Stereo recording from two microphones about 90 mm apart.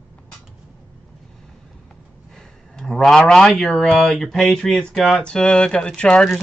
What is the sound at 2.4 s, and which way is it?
Speech, 5° left (ahead or behind).